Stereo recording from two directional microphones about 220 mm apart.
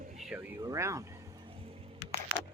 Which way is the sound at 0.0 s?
30° right (ahead or behind).